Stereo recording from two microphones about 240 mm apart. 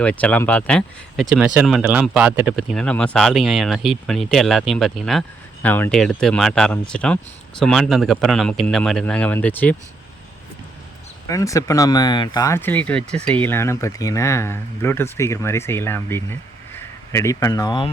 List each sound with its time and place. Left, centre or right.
0.0 s speech: centre
11.3 s speech: centre